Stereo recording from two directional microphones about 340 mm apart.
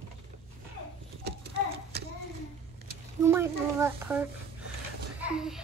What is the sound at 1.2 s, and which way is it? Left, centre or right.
Horse, right.